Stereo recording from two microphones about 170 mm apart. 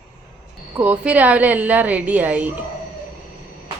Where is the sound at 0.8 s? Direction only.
10° right (ahead or behind).